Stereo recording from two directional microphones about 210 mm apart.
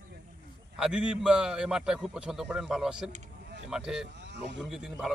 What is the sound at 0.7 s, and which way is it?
Speech, 5° right (ahead or behind).